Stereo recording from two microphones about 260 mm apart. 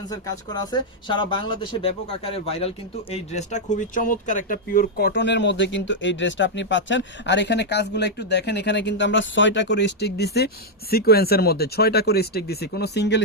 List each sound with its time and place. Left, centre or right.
0.1 s speech: centre; by 13.2 s left